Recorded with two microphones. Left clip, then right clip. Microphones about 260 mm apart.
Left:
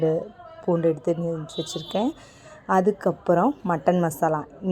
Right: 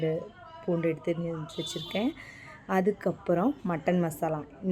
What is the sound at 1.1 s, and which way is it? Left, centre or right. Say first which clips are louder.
Speech: left 7 dB; centre.